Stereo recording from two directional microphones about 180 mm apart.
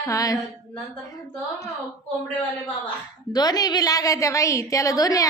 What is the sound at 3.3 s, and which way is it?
A woman's voice, 20° left (ahead or behind).